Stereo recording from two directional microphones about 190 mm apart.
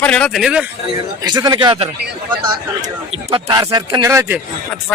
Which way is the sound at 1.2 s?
20° right (ahead or behind).